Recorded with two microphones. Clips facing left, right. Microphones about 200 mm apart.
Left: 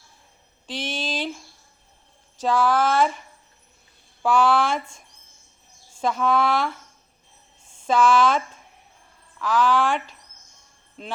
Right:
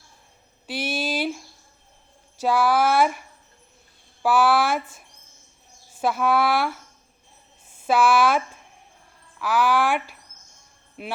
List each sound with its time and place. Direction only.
0.7 s a sound: 10° right (ahead or behind)
2.4 s speech: 10° right (ahead or behind)
5.9 s speech: 5° right (ahead or behind)
7.8 s speech: 10° right (ahead or behind)